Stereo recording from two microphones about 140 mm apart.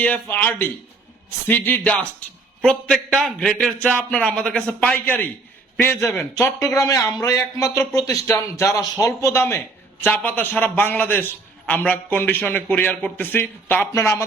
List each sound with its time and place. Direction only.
0.0 s a man's voice: 10° left (ahead or behind)